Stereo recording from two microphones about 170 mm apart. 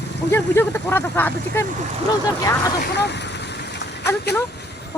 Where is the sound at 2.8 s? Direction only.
80° left.